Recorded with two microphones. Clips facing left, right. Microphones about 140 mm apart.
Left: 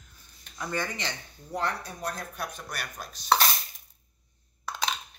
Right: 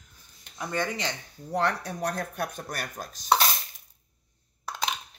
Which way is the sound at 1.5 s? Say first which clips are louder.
Right 4 dB; 75° right (ahead or behind).